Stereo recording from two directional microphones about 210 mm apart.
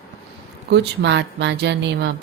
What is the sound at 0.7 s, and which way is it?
Speech, 55° right (ahead or behind).